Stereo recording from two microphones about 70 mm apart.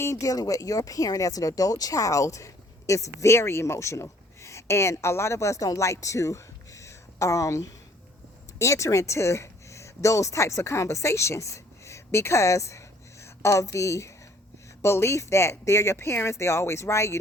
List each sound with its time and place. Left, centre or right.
0.0 s speech: left